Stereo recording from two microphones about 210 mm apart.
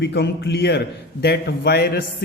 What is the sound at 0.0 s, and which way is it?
Speech, 55° left (ahead or behind).